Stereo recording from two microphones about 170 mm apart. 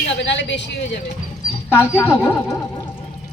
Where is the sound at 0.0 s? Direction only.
90° left.